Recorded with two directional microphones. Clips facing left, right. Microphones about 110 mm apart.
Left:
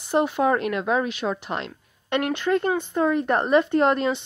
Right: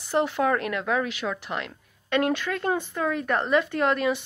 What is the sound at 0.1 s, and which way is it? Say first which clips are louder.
A woman's voice: left 3 dB; 20° left (ahead or behind).